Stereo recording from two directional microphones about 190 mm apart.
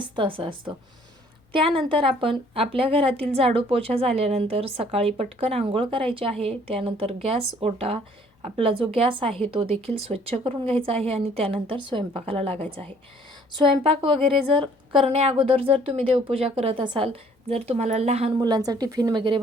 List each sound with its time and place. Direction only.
0.0 s a woman's voice: 25° right (ahead or behind)
18.3 s speech: 20° right (ahead or behind)